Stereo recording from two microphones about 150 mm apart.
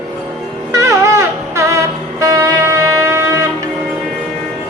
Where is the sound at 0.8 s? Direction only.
20° right (ahead or behind).